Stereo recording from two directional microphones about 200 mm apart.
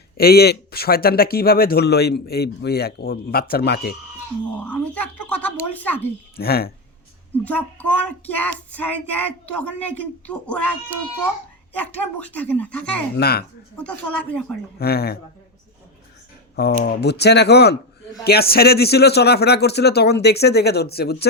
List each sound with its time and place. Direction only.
0.2 s speech: 50° left (ahead or behind)
4.5 s speech: 5° left (ahead or behind)
6.3 s speech: 50° left (ahead or behind)
7.4 s child singing: 5° left (ahead or behind)
13.1 s speech: 50° left (ahead or behind)
13.7 s speech: 5° left (ahead or behind)
14.8 s speech: 50° left (ahead or behind)
16.6 s speech: 50° left (ahead or behind)